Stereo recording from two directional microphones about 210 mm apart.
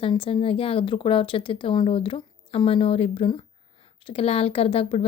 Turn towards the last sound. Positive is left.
turn(degrees=30)  # may be behind; listen again after turning